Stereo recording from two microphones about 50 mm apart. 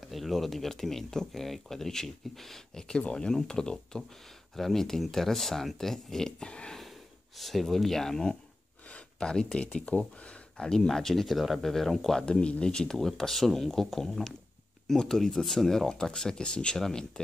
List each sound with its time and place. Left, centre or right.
0.1 s speech: centre
6.8 s speech: centre
8.8 s speech: left
10.6 s speech: centre
12.2 s speech: centre